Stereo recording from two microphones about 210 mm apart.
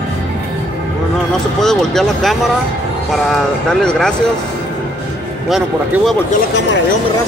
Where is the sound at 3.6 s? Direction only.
5° left (ahead or behind).